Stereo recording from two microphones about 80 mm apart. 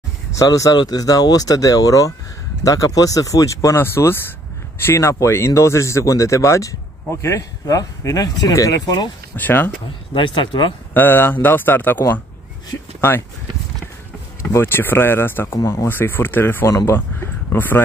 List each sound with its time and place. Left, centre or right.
0.4 s speech: left
3.8 s speech: left
9.4 s speech: left
10.1 s speech: left
10.9 s speech: left
14.4 s speech: left
15.6 s speech: left
15.9 s speech: left